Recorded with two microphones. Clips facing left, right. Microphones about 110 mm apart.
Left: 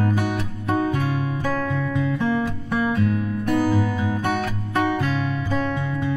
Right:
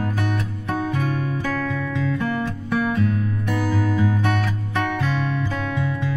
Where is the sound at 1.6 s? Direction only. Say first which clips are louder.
Left 1 dB; 20° left (ahead or behind).